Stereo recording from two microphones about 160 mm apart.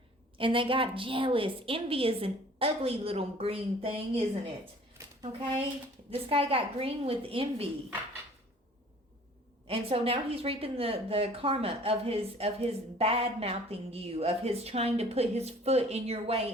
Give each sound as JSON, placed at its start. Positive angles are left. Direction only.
{"t": 0.3, "sound": "a woman's voice", "side_deg": -35}
{"t": 6.1, "sound": "a woman's voice", "side_deg": -35}
{"t": 9.6, "sound": "a woman's voice", "side_deg": -35}